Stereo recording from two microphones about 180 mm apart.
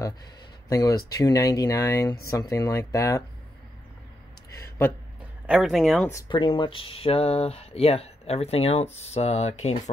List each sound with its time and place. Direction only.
0.7 s speech: 20° left (ahead or behind)
4.6 s a sound: 15° left (ahead or behind)
5.5 s speech: centre (ahead or behind)
6.0 s speech: 15° left (ahead or behind)
6.3 s speech: 30° left (ahead or behind)